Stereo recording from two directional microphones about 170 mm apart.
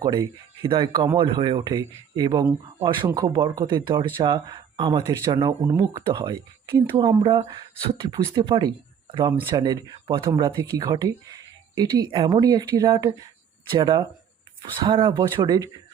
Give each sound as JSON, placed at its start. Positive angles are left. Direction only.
{"t": 0.0, "sound": "speech", "side_deg": -20}